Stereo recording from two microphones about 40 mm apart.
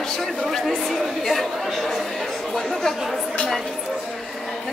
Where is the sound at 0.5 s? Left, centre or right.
Centre.